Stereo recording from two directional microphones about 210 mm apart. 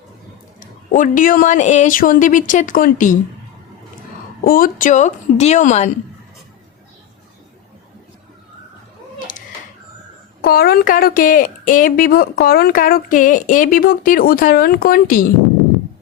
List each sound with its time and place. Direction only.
0.9 s a woman's voice: 40° left (ahead or behind)
4.4 s a woman's voice: 45° left (ahead or behind)
9.1 s cat: 40° left (ahead or behind)
10.4 s speech: 45° left (ahead or behind)